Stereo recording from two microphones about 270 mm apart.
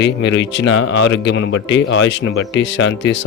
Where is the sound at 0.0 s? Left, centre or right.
Left.